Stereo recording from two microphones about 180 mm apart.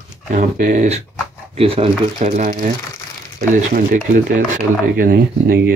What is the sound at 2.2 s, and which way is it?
Speech, 45° right (ahead or behind).